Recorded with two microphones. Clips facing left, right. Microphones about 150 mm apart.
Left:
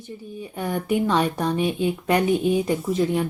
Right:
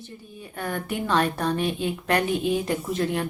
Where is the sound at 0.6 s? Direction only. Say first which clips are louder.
Left 6 dB; 10° left (ahead or behind).